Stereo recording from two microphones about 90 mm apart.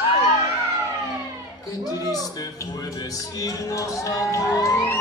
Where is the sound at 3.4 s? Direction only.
40° left (ahead or behind).